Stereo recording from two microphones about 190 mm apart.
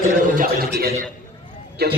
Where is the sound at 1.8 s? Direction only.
60° right (ahead or behind).